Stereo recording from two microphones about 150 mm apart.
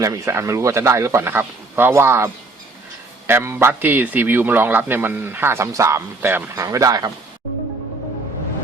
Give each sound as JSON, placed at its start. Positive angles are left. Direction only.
{"t": 0.0, "sound": "a man's voice", "side_deg": -20}
{"t": 6.7, "sound": "speech", "side_deg": -25}